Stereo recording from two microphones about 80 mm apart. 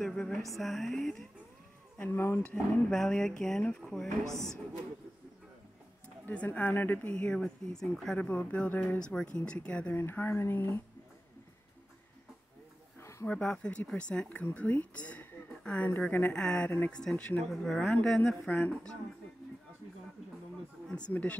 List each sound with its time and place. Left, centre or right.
0.0 s a sound: centre
0.6 s speech: centre
2.0 s speech: left
2.4 s speech: centre
4.2 s a woman's voice: right
6.2 s speech: centre
7.2 s speech: centre
8.2 s speech: centre
9.9 s speech: left
13.4 s a woman's voice: centre
21.1 s speech: centre